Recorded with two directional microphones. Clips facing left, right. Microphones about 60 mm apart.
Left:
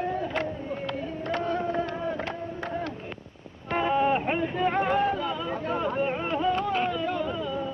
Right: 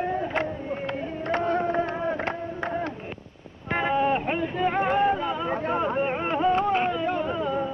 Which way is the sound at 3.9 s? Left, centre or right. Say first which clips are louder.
Even; centre.